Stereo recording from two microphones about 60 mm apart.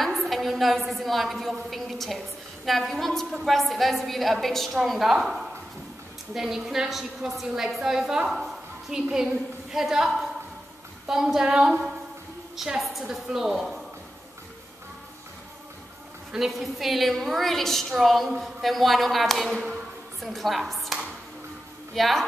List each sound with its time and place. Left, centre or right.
0.0 s a woman's voice: centre
12.5 s a woman's voice: centre
16.3 s a woman's voice: centre